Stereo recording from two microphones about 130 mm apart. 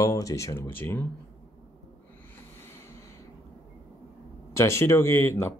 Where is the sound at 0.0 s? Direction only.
25° left (ahead or behind).